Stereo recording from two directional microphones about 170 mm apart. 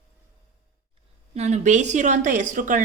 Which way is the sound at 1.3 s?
40° right (ahead or behind).